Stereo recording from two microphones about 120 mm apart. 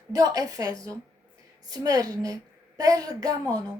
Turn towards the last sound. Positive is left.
turn(degrees=-30)  # may be behind; listen again after turning